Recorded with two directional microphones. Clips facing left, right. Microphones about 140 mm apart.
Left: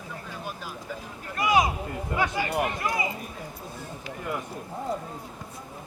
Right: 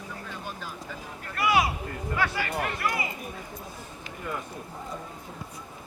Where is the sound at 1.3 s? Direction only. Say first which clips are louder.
Left 2 dB; 20° left (ahead or behind).